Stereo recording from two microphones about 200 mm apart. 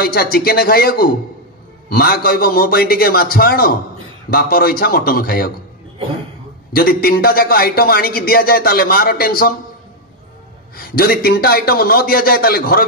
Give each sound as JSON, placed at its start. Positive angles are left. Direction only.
{"t": 0.0, "sound": "a man's voice", "side_deg": 45}
{"t": 6.7, "sound": "a man's voice", "side_deg": 50}
{"t": 10.8, "sound": "a man's voice", "side_deg": 50}